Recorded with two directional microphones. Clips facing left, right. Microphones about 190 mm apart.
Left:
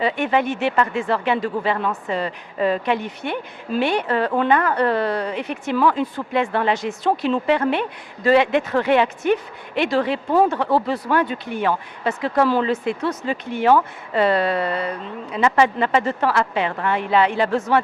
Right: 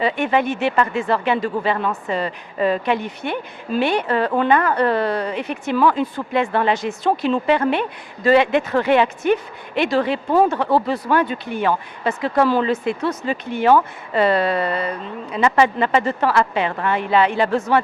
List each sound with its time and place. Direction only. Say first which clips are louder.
0.0 s speech: right 1 dB; 10° right (ahead or behind)
10.3 s speech: right 1 dB; 25° right (ahead or behind)
10.8 s speech: right 1 dB; 15° right (ahead or behind)